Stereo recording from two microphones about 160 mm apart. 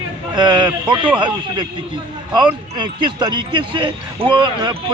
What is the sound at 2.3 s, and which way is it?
Speech, 30° right (ahead or behind).